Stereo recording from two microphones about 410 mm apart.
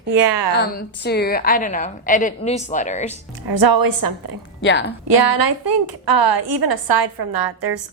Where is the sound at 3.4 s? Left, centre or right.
Right.